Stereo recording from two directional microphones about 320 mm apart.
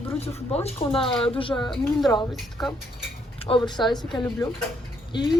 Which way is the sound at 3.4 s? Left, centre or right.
Centre.